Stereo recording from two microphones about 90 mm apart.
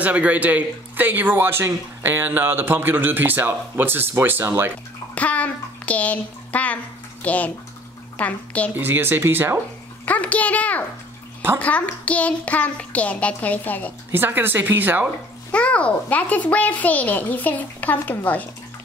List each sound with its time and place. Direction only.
0.0 s a man's voice: 15° right (ahead or behind)
5.1 s a child's voice: 15° left (ahead or behind)
8.7 s a man's voice: 20° right (ahead or behind)
10.0 s a child's voice: 15° left (ahead or behind)
14.1 s a man's voice: 25° right (ahead or behind)
15.5 s a child's voice: 15° left (ahead or behind)